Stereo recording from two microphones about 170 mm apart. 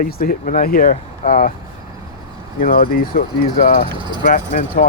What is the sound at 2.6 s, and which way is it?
Speech, 60° left (ahead or behind).